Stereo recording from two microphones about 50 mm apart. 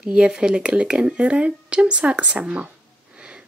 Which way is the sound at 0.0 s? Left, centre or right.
Centre.